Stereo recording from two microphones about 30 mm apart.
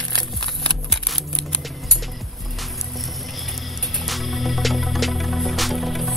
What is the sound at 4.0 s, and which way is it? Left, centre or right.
Music, centre.